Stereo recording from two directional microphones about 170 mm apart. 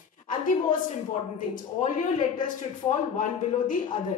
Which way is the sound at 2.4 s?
50° left (ahead or behind).